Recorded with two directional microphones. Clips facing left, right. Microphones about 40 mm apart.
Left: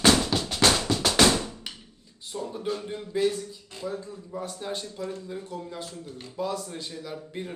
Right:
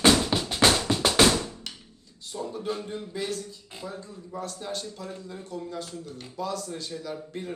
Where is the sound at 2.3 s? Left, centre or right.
Centre.